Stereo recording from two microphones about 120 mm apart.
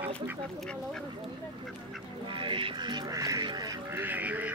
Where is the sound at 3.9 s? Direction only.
15° right (ahead or behind).